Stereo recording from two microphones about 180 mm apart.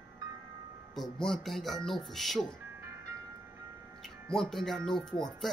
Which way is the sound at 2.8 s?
15° right (ahead or behind).